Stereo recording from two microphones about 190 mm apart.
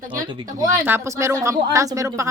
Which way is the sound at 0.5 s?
15° right (ahead or behind).